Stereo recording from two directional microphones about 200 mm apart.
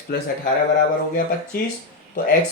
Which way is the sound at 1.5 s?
45° left (ahead or behind).